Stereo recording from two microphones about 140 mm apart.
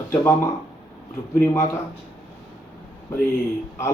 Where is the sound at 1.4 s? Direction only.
20° left (ahead or behind).